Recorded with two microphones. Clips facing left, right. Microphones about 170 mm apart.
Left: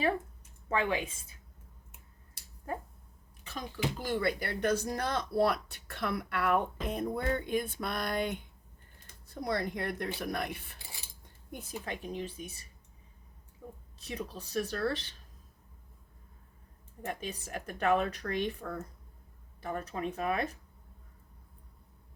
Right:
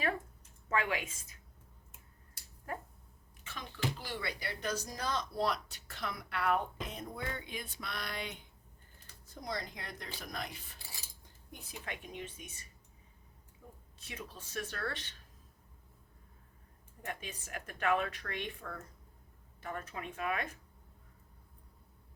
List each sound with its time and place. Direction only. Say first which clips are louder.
0.7 s speech: left 3 dB; 30° left (ahead or behind)
3.4 s speech: left 4 dB; 40° left (ahead or behind)
7.3 s a sound: left 12 dB; 50° left (ahead or behind)
9.3 s speech: left 8 dB; 65° left (ahead or behind)
11.7 s speech: left 6 dB; 35° left (ahead or behind)
13.6 s a sound: left 8 dB; 45° left (ahead or behind)
14.0 s speech: left 8 dB; 35° left (ahead or behind)
17.0 s speech: left 6 dB; 35° left (ahead or behind)